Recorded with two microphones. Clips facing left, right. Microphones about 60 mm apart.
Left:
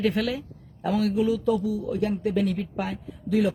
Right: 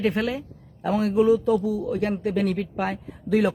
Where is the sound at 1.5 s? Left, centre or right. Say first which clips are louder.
Right 2 dB; right.